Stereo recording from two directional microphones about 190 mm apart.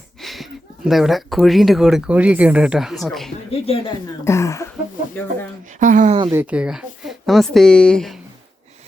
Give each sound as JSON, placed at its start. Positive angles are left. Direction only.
{"t": 0.2, "sound": "speech", "side_deg": 0}
{"t": 3.5, "sound": "speech", "side_deg": 30}
{"t": 4.2, "sound": "speech", "side_deg": 15}
{"t": 5.8, "sound": "speech", "side_deg": -45}
{"t": 6.3, "sound": "speech", "side_deg": -5}